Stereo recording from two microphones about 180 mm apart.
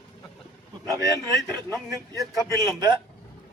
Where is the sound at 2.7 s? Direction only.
20° right (ahead or behind).